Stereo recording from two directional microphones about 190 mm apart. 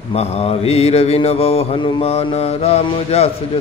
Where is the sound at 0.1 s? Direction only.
35° left (ahead or behind).